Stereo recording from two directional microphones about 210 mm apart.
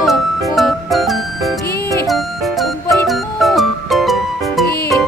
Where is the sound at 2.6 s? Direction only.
Centre (ahead or behind).